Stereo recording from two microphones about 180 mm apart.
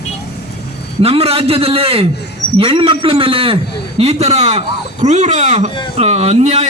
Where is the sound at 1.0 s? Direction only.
35° right (ahead or behind).